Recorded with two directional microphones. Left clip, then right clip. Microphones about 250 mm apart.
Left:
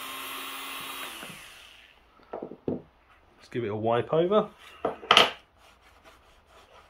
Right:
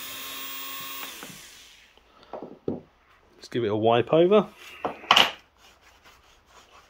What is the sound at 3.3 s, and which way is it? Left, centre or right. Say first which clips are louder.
Speech: right 6 dB; right.